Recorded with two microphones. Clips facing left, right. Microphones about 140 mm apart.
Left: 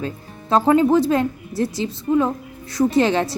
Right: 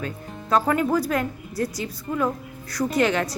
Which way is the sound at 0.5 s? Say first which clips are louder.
Left 6 dB; 25° left (ahead or behind).